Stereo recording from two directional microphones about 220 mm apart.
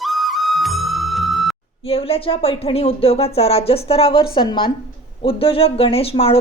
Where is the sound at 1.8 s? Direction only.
25° left (ahead or behind).